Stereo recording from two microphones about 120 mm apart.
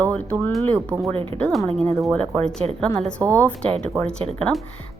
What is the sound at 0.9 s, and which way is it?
Speech, 25° right (ahead or behind).